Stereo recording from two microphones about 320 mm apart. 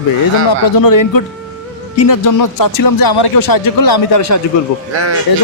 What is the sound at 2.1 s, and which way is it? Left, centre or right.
A man's voice, left.